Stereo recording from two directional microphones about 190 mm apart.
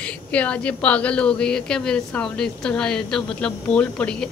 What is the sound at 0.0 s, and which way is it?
A woman's voice, 5° left (ahead or behind).